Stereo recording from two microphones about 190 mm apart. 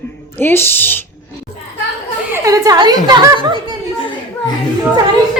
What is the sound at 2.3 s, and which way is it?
A woman's voice, 15° right (ahead or behind).